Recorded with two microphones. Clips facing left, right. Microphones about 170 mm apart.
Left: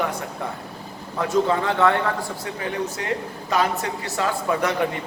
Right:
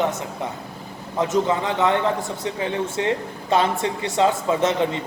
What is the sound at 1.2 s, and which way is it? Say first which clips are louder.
A man's voice: even; 20° right (ahead or behind).